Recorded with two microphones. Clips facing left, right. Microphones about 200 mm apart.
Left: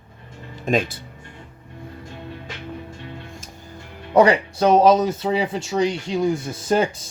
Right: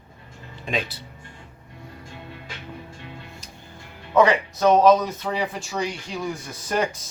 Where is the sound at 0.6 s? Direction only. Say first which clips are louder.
Left 7 dB; 45° left (ahead or behind).